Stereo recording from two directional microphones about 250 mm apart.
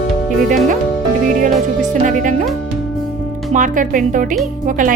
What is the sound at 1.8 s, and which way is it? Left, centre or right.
Music, right.